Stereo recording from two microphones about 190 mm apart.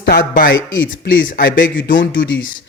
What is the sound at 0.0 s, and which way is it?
Speech, 50° left (ahead or behind).